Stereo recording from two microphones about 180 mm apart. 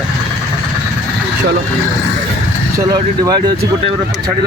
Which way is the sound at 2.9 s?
20° right (ahead or behind).